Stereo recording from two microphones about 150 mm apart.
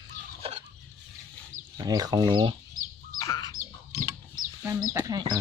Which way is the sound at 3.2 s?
20° left (ahead or behind).